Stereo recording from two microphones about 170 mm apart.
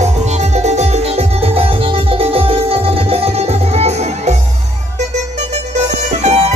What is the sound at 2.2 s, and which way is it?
Music, 35° right (ahead or behind).